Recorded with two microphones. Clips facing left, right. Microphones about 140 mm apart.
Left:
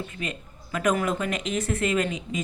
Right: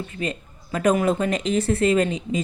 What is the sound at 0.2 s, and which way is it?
Speech, 35° right (ahead or behind).